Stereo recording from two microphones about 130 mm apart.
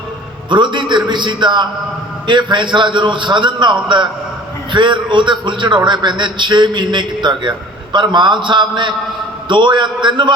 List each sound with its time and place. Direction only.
0.5 s a man's voice: 35° right (ahead or behind)